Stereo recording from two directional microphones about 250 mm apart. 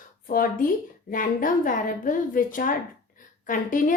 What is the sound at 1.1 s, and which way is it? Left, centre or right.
A woman's voice, left.